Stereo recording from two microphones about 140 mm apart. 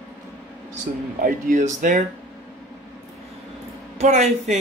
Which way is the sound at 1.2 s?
65° right (ahead or behind).